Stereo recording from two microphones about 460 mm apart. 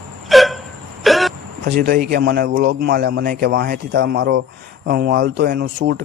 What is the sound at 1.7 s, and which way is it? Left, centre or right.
Speech, centre.